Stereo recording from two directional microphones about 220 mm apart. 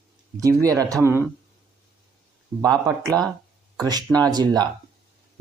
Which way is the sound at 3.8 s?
15° right (ahead or behind).